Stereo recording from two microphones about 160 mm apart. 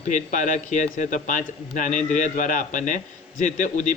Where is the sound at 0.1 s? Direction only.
50° left (ahead or behind).